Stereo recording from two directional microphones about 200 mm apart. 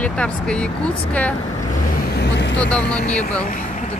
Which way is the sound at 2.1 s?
60° left (ahead or behind).